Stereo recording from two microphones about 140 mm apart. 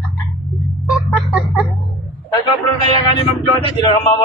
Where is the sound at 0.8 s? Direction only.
5° right (ahead or behind).